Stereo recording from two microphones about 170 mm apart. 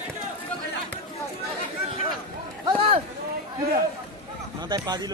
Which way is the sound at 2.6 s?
25° right (ahead or behind).